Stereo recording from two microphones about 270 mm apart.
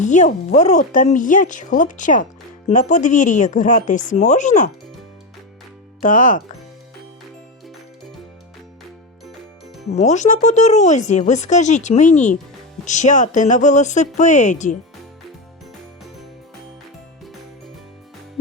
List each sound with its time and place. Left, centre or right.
0.0 s speech: left
6.0 s speech: left
9.9 s speech: left